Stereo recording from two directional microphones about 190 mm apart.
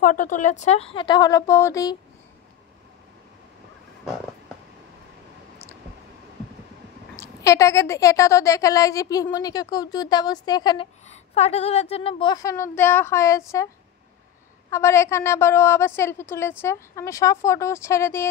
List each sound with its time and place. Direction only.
0.0 s a woman's voice: 45° left (ahead or behind); by 2.0 s 15° left (ahead or behind)
7.2 s a woman's voice: 15° left (ahead or behind)
11.1 s a woman's voice: 35° left (ahead or behind); by 13.7 s 15° left (ahead or behind)
14.7 s a woman's voice: 15° left (ahead or behind)